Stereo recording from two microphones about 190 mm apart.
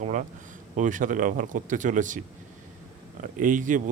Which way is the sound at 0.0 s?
40° right (ahead or behind).